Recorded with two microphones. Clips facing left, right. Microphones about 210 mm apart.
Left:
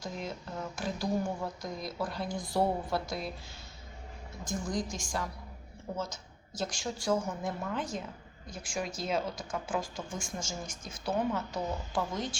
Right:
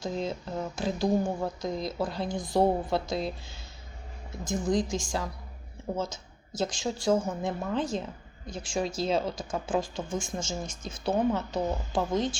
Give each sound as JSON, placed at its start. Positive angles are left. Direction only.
{"t": 0.0, "sound": "speech", "side_deg": -25}
{"t": 4.4, "sound": "speech", "side_deg": -25}
{"t": 6.6, "sound": "speech", "side_deg": -25}